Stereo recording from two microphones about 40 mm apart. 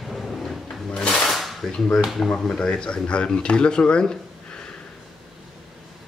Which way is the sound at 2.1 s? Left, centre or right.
Centre.